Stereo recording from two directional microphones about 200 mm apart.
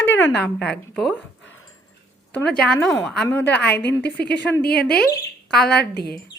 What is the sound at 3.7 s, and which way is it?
Speech, 60° left (ahead or behind).